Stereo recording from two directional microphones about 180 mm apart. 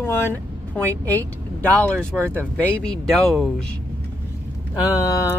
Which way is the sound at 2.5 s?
5° left (ahead or behind).